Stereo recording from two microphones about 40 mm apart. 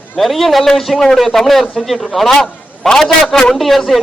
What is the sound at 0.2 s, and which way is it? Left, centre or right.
A man's voice, centre.